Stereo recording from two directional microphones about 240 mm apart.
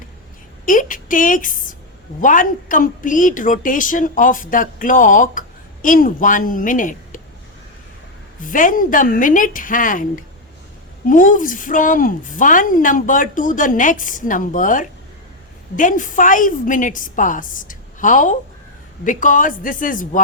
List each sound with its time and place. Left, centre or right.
0.6 s a woman's voice: left
8.4 s a woman's voice: left